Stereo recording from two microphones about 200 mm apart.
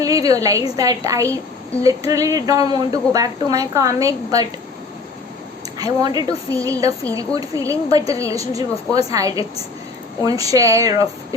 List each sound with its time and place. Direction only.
0.0 s a woman's voice: 15° right (ahead or behind)
5.8 s a woman's voice: 20° right (ahead or behind)